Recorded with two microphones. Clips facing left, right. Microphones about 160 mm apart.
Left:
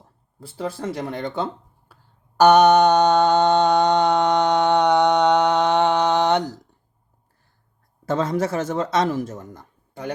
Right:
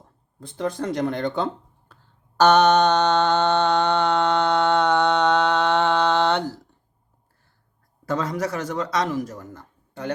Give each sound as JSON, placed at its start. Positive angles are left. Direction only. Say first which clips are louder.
{"t": 0.0, "sound": "speech", "louder": "even", "side_deg": 5}
{"t": 1.9, "sound": "a sound", "louder": "even", "side_deg": 10}
{"t": 2.4, "sound": "mantra", "louder": "left 3 dB", "side_deg": 10}
{"t": 8.0, "sound": "speech", "louder": "left 3 dB", "side_deg": 25}